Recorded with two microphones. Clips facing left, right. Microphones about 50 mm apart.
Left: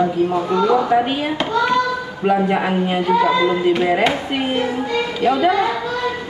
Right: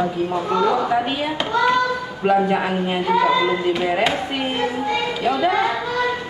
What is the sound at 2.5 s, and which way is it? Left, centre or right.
Speech, centre.